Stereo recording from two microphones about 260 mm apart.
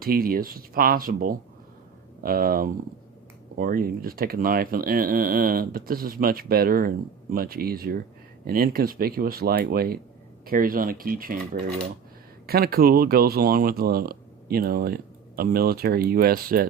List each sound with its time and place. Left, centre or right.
0.0 s speech: right